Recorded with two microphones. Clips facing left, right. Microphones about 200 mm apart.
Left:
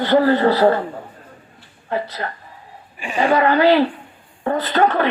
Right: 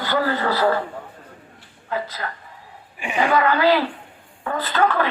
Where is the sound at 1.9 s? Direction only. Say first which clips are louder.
Left 3 dB; 35° left (ahead or behind).